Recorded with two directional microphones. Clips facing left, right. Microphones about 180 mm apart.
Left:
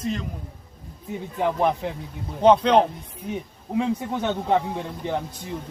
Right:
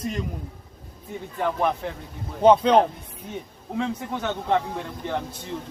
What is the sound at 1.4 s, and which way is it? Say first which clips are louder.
Speech: left 2 dB; 15° left (ahead or behind).